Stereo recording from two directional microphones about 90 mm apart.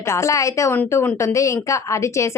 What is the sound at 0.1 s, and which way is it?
Speech, 35° left (ahead or behind).